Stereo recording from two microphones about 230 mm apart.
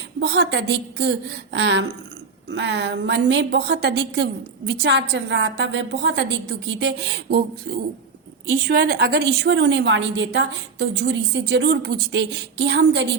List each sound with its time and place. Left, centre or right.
0.2 s a woman's voice: right